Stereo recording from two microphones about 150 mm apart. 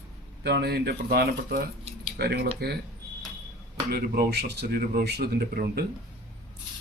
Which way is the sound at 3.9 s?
80° right.